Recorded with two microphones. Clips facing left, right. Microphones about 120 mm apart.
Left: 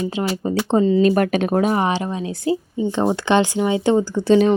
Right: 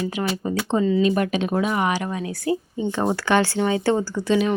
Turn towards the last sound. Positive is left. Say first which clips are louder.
# left 6 dB
turn(degrees=35)  # may be behind; listen again after turning